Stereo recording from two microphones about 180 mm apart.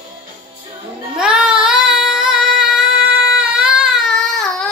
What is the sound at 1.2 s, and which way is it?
Music, 5° right (ahead or behind).